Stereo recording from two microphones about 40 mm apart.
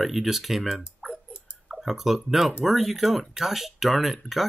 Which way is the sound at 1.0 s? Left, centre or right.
Right.